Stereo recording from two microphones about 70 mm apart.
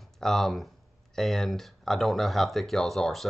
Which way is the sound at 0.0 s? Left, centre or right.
Centre.